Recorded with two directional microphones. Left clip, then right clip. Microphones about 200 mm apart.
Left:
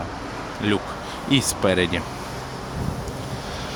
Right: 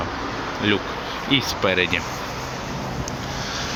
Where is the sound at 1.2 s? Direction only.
25° left (ahead or behind).